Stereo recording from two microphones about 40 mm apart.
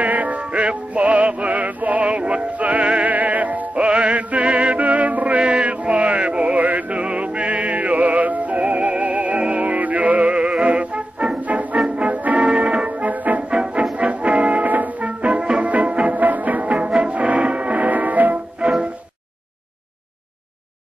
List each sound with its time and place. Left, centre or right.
0.0 s music: right
5.4 s chant: right
6.9 s music: right
12.4 s music: right
13.5 s brass instrument: right
13.9 s music: right
16.2 s music: right
18.6 s music: right